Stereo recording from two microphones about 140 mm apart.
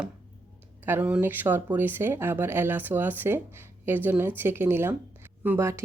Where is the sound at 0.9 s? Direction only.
10° right (ahead or behind).